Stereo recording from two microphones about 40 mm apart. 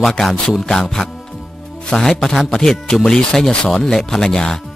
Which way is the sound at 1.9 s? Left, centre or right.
Centre.